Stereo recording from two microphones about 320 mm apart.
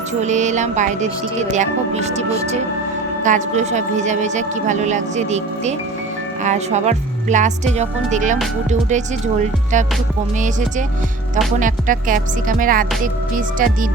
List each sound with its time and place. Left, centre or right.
0.1 s speech: right
3.2 s speech: right